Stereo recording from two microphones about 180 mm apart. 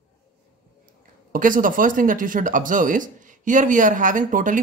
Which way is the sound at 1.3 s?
50° right (ahead or behind).